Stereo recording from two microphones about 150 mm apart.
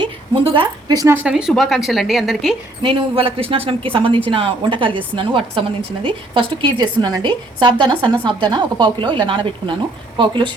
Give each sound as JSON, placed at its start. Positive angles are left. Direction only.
{"t": 0.0, "sound": "speech", "side_deg": -35}
{"t": 2.8, "sound": "a woman's voice", "side_deg": -35}